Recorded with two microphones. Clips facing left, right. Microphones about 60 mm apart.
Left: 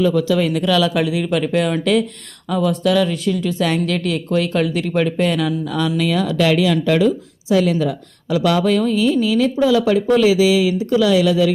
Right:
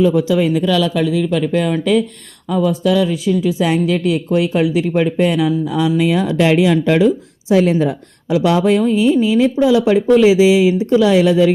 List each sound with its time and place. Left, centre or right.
0.0 s a woman's voice: centre
7.4 s a woman's voice: right